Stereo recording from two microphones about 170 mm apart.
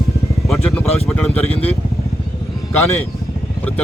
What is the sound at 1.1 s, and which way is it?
Speech, 10° left (ahead or behind).